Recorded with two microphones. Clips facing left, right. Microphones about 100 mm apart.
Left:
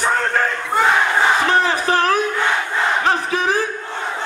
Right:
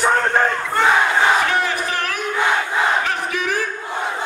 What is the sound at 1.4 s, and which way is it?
Battle cry, 30° left (ahead or behind).